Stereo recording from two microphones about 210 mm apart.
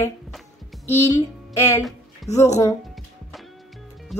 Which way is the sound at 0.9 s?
15° left (ahead or behind).